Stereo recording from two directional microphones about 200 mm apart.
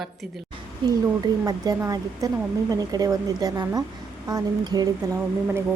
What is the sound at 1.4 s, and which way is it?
Speech, 20° right (ahead or behind).